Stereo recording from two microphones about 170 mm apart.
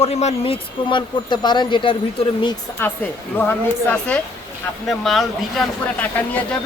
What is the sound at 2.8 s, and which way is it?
Speech, 15° left (ahead or behind).